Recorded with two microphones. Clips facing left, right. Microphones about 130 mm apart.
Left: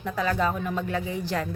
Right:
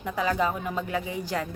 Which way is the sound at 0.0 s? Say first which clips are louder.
Even; 15° right (ahead or behind).